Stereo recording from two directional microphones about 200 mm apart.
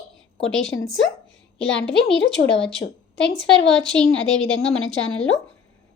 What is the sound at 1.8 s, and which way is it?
Speech, 60° left (ahead or behind).